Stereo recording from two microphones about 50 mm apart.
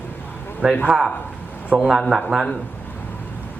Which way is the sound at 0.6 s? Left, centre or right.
Centre.